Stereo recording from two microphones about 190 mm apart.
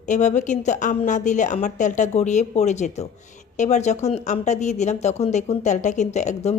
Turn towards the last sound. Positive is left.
turn(degrees=35)  # may be behind; listen again after turning